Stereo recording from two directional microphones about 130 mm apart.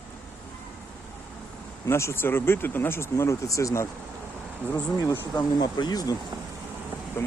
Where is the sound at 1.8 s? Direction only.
20° left (ahead or behind).